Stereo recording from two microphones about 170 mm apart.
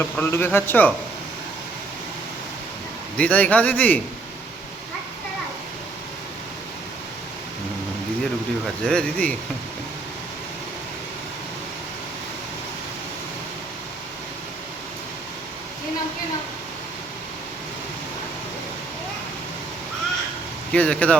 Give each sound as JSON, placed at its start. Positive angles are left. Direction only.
{"t": 0.0, "sound": "a man's voice", "side_deg": 15}
{"t": 3.2, "sound": "a man's voice", "side_deg": 10}
{"t": 8.6, "sound": "speech", "side_deg": 5}
{"t": 20.7, "sound": "a man's voice", "side_deg": 5}